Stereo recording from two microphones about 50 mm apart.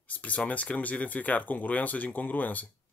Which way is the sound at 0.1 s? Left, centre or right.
Left.